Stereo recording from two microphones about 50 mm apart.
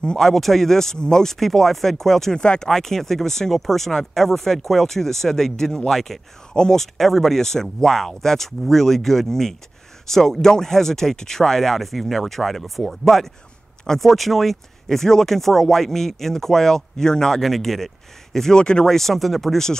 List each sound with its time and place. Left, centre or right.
0.0 s speech: centre
2.4 s speech: centre
2.7 s speech: centre
18.9 s speech: centre